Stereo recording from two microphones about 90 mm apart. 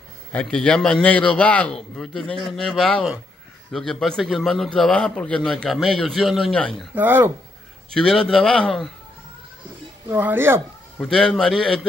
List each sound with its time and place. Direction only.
0.3 s a man's voice: 15° left (ahead or behind)
7.0 s speech: 25° right (ahead or behind)
7.9 s a man's voice: 10° left (ahead or behind)
10.0 s speech: 25° right (ahead or behind)
11.0 s a man's voice: 10° left (ahead or behind)